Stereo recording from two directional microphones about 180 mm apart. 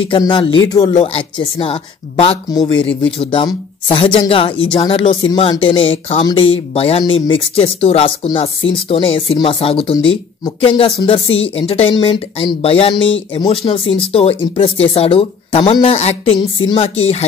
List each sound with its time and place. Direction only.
0.1 s speech: 30° left (ahead or behind)